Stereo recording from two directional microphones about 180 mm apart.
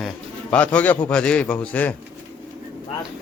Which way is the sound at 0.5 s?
5° left (ahead or behind).